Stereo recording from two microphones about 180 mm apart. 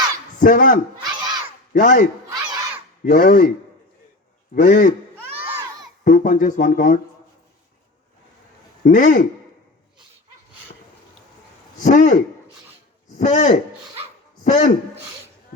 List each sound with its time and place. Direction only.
0.3 s speech: 50° left (ahead or behind)
1.2 s battle cry: 25° right (ahead or behind)
1.7 s speech: 45° left (ahead or behind)
2.3 s crowd: 20° right (ahead or behind)
3.0 s speech: 50° left (ahead or behind)
4.5 s speech: 45° left (ahead or behind)
5.4 s a sound: 15° right (ahead or behind)
6.1 s speech: 45° left (ahead or behind)
8.8 s speech: 45° left (ahead or behind)
11.8 s a man's voice: 40° left (ahead or behind)
13.1 s a man's voice: 40° left (ahead or behind)